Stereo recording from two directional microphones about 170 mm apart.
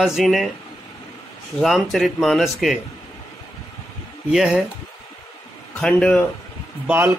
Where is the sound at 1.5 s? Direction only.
Centre (ahead or behind).